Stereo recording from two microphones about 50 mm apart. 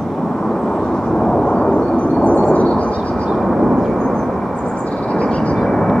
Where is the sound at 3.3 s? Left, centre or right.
Centre.